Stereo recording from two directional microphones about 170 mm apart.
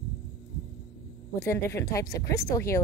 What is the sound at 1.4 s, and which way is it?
Speech, 15° left (ahead or behind).